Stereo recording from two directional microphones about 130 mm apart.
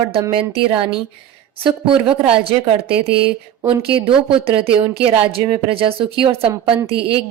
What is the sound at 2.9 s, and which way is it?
A woman's voice, 45° right (ahead or behind).